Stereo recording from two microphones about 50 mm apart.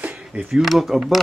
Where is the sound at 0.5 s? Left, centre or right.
Centre.